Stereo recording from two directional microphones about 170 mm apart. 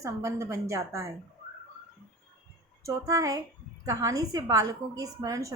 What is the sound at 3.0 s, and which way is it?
A woman's voice, 20° right (ahead or behind).